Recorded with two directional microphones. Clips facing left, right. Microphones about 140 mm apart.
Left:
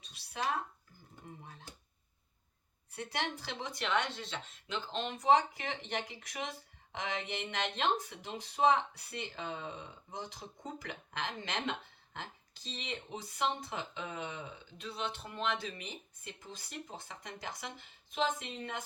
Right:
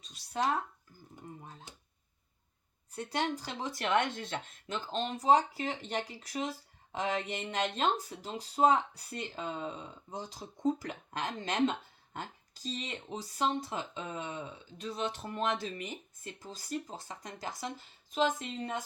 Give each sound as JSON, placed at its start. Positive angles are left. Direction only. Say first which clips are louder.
{"t": 2.9, "sound": "speech", "louder": "right 5 dB", "side_deg": -35}